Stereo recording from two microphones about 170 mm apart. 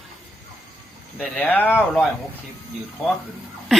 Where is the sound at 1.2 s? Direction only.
5° left (ahead or behind).